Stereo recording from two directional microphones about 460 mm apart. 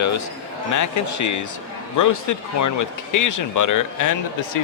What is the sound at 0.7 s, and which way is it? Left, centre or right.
Speech, left.